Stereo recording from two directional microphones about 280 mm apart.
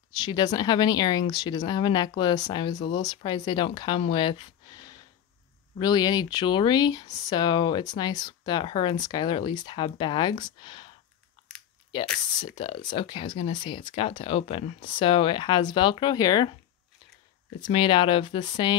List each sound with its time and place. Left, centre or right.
0.2 s speech: centre
12.4 s speech: centre
17.6 s speech: centre